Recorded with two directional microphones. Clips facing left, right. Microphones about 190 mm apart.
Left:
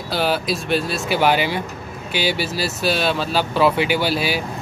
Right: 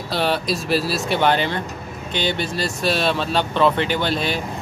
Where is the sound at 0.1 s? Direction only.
Centre (ahead or behind).